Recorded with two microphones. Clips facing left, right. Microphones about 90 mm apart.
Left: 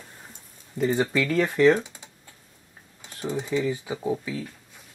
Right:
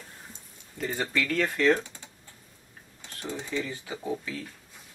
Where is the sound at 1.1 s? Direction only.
15° left (ahead or behind).